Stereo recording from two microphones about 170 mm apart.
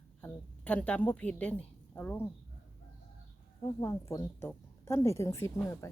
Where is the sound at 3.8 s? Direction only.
15° left (ahead or behind).